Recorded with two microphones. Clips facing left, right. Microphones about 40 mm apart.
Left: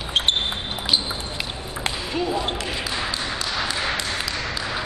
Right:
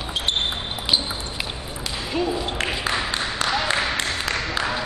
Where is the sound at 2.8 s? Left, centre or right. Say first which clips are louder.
Right 2 dB; right.